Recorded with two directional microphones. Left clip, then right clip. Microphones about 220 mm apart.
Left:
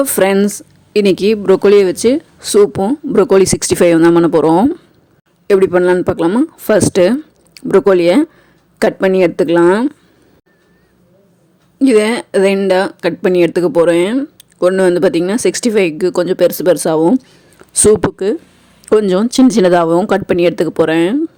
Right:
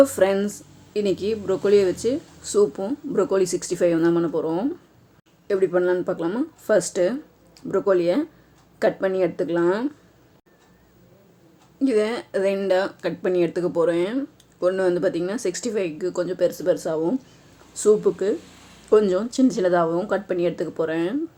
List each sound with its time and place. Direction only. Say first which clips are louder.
0.0 s speech: left 6 dB; 40° left (ahead or behind)
11.8 s speech: left 11 dB; 40° left (ahead or behind)